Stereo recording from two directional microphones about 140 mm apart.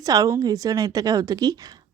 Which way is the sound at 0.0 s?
25° right (ahead or behind).